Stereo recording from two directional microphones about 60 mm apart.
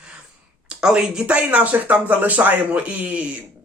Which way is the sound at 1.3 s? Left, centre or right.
Right.